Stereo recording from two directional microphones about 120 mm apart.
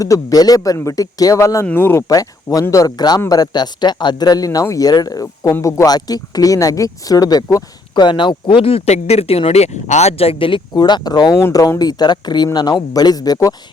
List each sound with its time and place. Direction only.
0.0 s speech: 30° left (ahead or behind)